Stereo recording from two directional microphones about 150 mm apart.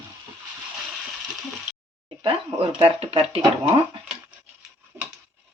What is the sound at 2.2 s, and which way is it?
Speech, 35° right (ahead or behind).